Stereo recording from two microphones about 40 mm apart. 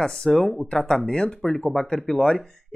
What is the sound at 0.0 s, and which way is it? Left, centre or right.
Speech, centre.